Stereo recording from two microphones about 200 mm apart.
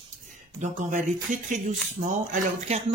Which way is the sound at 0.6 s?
40° right (ahead or behind).